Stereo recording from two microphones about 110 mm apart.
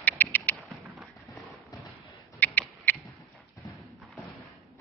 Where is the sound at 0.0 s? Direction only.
15° left (ahead or behind).